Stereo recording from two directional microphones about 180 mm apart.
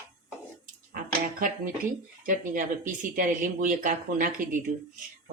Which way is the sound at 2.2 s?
50° right (ahead or behind).